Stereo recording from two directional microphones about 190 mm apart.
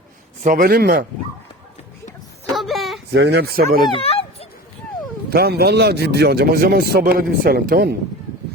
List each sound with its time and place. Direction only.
0.4 s a man's voice: 45° right (ahead or behind)
2.6 s a sound: centre (ahead or behind)
3.1 s a man's voice: 60° right (ahead or behind)
3.8 s bow-wow: 30° left (ahead or behind)
5.3 s a man's voice: 55° right (ahead or behind)